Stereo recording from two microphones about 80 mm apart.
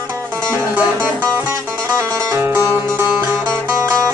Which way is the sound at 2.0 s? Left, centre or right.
Right.